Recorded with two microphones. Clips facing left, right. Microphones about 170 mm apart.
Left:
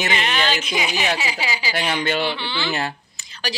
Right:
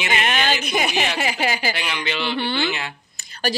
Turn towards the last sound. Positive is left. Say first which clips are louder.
# right 5 dB
turn(degrees=-50)  # may be behind; listen again after turning